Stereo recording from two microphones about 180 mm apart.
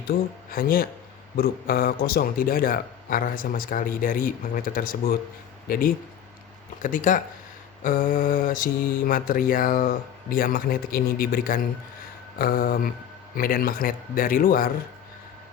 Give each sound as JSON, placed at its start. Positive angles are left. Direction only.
{"t": 0.5, "sound": "a man's voice", "side_deg": 55}